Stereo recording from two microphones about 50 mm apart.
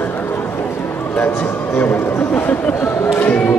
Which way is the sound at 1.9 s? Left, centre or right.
Left.